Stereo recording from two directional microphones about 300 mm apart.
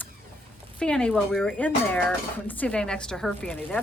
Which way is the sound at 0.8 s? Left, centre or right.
Centre.